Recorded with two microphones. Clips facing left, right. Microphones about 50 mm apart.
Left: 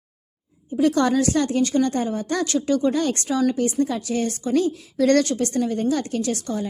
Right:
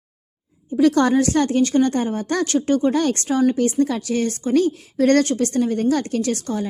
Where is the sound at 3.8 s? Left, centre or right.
Right.